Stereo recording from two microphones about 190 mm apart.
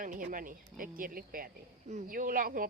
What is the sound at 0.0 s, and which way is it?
Speech, 45° right (ahead or behind).